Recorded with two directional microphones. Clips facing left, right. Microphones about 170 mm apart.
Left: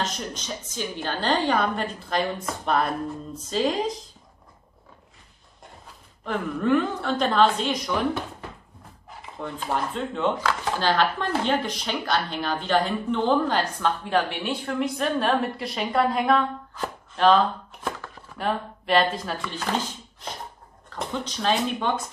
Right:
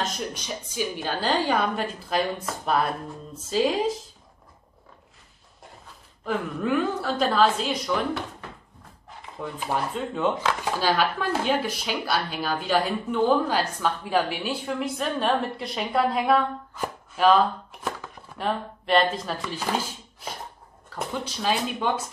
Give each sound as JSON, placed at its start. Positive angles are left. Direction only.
{"t": 0.3, "sound": "a woman's voice", "side_deg": -10}
{"t": 6.2, "sound": "a woman's voice", "side_deg": -5}
{"t": 9.4, "sound": "speech", "side_deg": -10}
{"t": 18.4, "sound": "a woman's voice", "side_deg": 0}